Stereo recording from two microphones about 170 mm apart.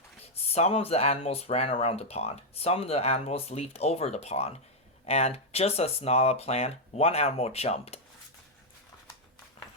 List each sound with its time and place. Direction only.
0.5 s speech: 35° left (ahead or behind)